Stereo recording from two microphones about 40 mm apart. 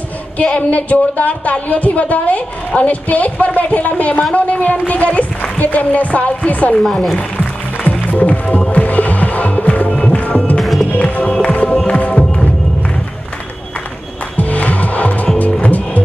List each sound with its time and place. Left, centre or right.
0.4 s speech: left
6.9 s speech: centre
7.2 s music: left
9.8 s music: left
10.6 s music: centre
11.0 s music: left
12.1 s music: centre
14.3 s music: left